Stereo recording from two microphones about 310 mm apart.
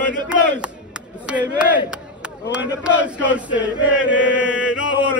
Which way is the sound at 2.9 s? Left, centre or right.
Centre.